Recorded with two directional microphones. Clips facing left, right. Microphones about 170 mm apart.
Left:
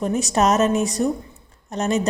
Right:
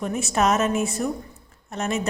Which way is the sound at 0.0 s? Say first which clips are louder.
Left 3 dB; 35° left (ahead or behind).